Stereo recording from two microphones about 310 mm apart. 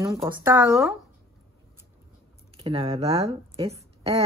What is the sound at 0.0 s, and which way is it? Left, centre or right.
Speech, centre.